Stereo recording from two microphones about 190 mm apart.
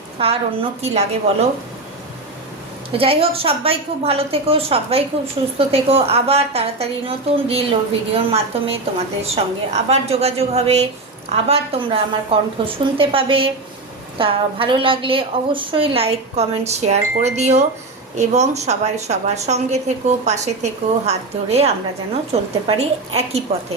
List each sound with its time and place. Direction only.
0.2 s a woman's voice: 30° right (ahead or behind)
3.0 s a woman's voice: 30° right (ahead or behind)